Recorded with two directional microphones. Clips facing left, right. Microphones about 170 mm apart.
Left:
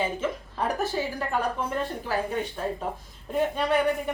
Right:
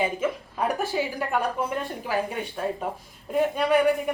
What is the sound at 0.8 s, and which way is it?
A woman's voice, 10° right (ahead or behind).